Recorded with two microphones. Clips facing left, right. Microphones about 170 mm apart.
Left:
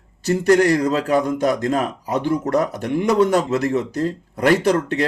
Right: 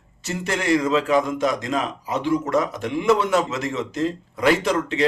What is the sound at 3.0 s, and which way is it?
Speech, 40° left (ahead or behind).